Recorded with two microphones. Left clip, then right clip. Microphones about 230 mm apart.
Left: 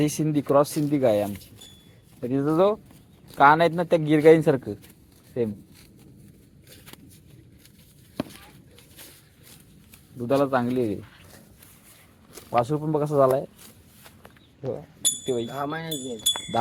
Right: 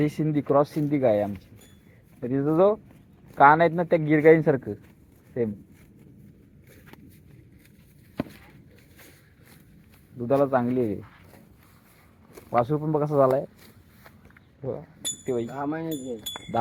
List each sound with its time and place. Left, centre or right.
0.0 s a man's voice: centre
2.3 s a man's voice: centre
10.2 s speech: centre
12.3 s speech: centre
15.0 s a sound: centre
15.5 s speech: left